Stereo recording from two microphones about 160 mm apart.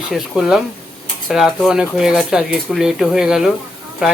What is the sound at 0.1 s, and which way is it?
Speech, centre (ahead or behind).